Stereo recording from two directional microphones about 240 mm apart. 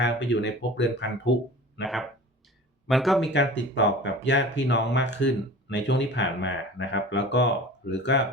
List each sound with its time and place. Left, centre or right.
0.0 s speech: left
1.8 s speech: centre
3.3 s speech: left